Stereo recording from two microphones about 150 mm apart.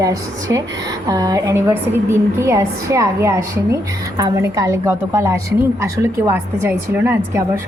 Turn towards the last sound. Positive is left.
turn(degrees=-15)  # may be behind; listen again after turning